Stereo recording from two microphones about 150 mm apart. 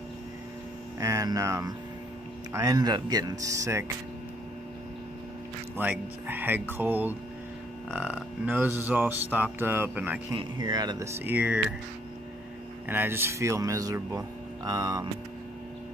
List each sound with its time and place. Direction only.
0.9 s speech: 20° right (ahead or behind)
5.8 s a sound: 15° right (ahead or behind)
10.3 s speech: 30° right (ahead or behind); by 11.6 s 10° right (ahead or behind)
12.8 s speech: 15° right (ahead or behind)